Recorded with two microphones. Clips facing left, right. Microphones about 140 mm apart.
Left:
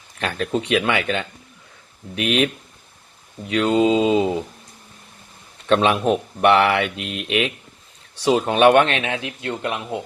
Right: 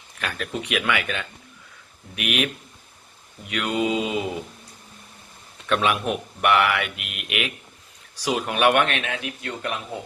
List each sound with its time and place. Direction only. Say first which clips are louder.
0.2 s speech: left 7 dB; 30° left (ahead or behind)
5.6 s speech: left 5 dB; 30° left (ahead or behind)